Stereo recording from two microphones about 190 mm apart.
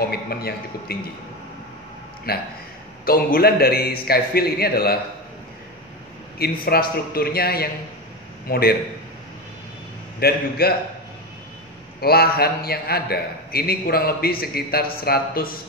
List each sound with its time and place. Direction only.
0.1 s a man's voice: 55° left (ahead or behind)
2.3 s a man's voice: 55° left (ahead or behind)
6.3 s a man's voice: 55° left (ahead or behind)
10.2 s a man's voice: 55° left (ahead or behind)
12.0 s a man's voice: 55° left (ahead or behind)